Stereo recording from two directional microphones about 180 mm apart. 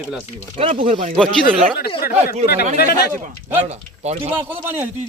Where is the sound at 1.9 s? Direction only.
60° left (ahead or behind).